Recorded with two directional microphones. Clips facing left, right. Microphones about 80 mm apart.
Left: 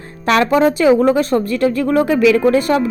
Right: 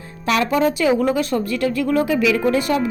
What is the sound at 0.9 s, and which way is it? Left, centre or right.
A woman's voice, left.